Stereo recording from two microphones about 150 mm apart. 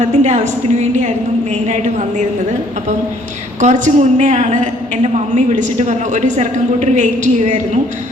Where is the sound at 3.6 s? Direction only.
55° right (ahead or behind).